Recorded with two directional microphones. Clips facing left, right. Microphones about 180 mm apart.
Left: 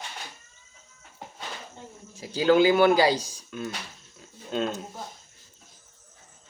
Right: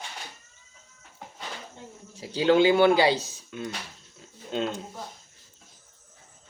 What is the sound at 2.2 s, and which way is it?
Speech, 30° right (ahead or behind).